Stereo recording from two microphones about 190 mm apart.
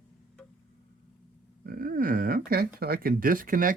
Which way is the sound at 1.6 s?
50° right (ahead or behind).